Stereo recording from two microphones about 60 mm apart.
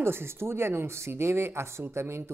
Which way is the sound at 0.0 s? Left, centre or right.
Right.